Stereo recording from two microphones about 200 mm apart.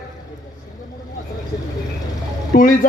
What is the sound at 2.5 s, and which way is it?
Speech, 40° left (ahead or behind).